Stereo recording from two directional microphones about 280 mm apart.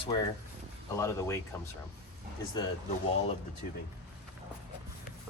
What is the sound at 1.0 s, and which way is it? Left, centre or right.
Speech, centre.